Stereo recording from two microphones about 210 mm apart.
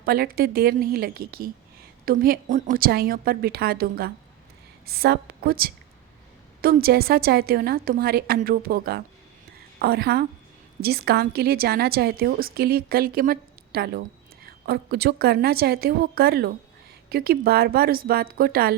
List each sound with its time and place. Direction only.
0.0 s a woman's voice: 45° right (ahead or behind)